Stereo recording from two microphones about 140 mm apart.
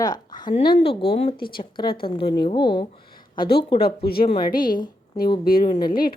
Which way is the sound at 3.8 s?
90° left.